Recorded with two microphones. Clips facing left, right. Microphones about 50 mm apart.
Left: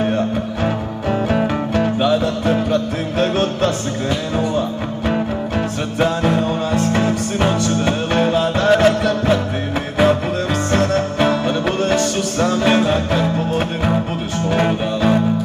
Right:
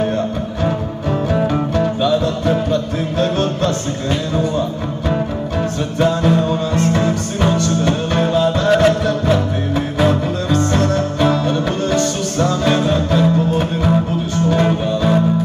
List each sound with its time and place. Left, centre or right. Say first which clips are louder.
1.3 s music: right 3 dB; left
3.2 s music: left 1 dB; centre
5.9 s music: right 2 dB; centre
8.6 s music: left 1 dB; centre
10.0 s music: left 2 dB; centre